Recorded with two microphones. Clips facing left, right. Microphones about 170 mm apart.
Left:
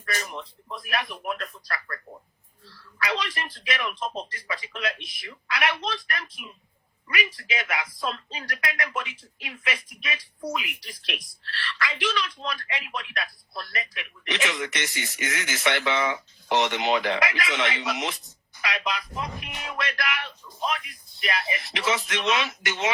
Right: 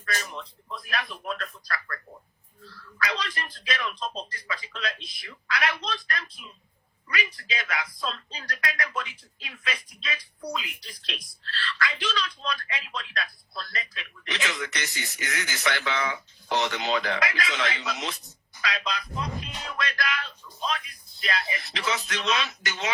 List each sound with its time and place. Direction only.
0.0 s speech: 20° left (ahead or behind)
3.1 s speech: 20° left (ahead or behind)
7.3 s speech: 20° left (ahead or behind)